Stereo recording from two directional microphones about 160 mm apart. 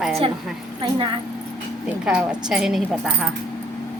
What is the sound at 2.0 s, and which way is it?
A woman's voice, 5° right (ahead or behind).